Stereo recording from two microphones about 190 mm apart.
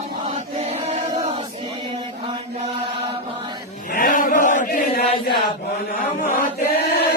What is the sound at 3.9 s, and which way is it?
Chant, 50° left (ahead or behind).